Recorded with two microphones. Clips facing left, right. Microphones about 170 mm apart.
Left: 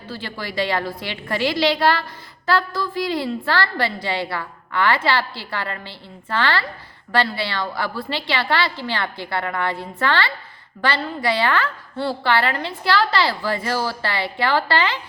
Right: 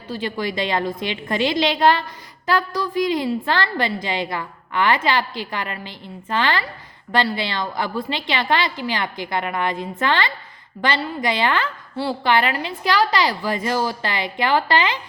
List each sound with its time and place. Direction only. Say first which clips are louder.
0.1 s a woman's voice: right 6 dB; 15° right (ahead or behind)